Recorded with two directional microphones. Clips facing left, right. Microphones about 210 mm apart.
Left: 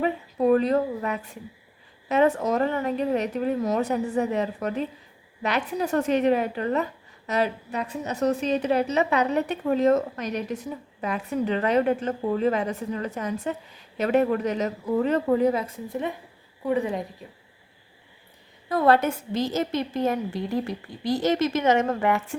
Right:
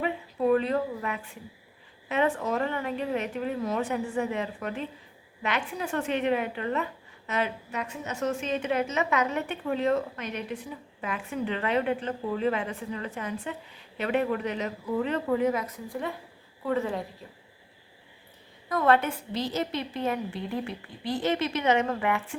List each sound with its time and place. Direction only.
0.0 s a sound: 40° left (ahead or behind)
2.0 s a woman's voice: 40° left (ahead or behind); by 17.1 s 15° left (ahead or behind)
18.7 s a woman's voice: 35° left (ahead or behind)